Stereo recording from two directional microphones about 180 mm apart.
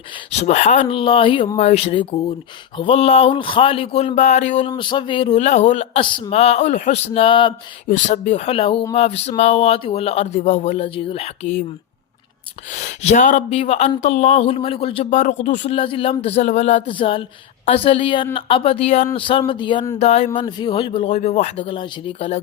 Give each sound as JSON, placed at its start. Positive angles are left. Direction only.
{"t": 0.3, "sound": "speech", "side_deg": 40}
{"t": 4.7, "sound": "speech", "side_deg": 25}
{"t": 7.9, "sound": "speech", "side_deg": 45}
{"t": 12.7, "sound": "speech", "side_deg": 40}
{"t": 20.0, "sound": "speech", "side_deg": 35}